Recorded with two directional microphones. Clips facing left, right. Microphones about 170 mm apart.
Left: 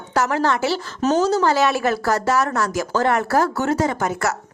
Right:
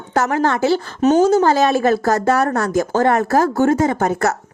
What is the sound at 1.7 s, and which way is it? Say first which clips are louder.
Speech: right 4 dB; 30° right (ahead or behind).